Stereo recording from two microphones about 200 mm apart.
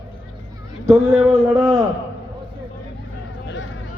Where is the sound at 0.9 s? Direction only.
15° right (ahead or behind).